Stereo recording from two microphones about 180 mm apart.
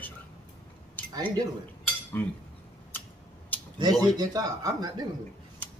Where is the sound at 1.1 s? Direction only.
20° right (ahead or behind).